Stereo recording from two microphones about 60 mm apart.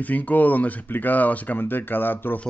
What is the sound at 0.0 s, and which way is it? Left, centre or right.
Speech, left.